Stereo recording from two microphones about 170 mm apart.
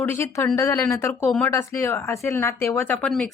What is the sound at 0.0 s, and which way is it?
Speech, 15° left (ahead or behind).